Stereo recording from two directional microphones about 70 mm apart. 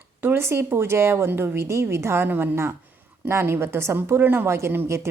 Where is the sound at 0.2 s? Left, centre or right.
Right.